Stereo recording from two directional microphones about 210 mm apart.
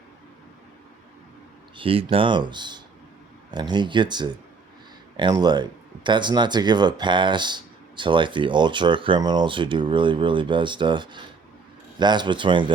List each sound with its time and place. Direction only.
1.7 s speech: 25° right (ahead or behind)